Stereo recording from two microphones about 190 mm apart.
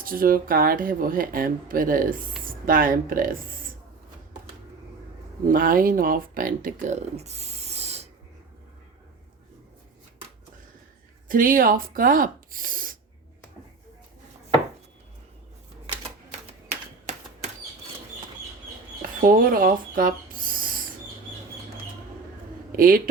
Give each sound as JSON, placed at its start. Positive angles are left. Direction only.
{"t": 0.0, "sound": "speech", "side_deg": -50}
{"t": 5.5, "sound": "speech", "side_deg": -45}
{"t": 11.3, "sound": "speech", "side_deg": -45}
{"t": 16.6, "sound": "typewriter", "side_deg": -35}
{"t": 19.2, "sound": "speech", "side_deg": -50}
{"t": 22.7, "sound": "speech", "side_deg": -50}